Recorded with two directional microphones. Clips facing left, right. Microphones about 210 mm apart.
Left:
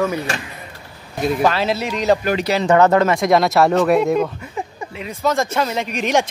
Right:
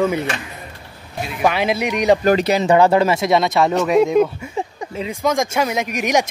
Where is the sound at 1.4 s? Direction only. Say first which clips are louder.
Right 4 dB; 15° right (ahead or behind); by 4.3 s centre (ahead or behind).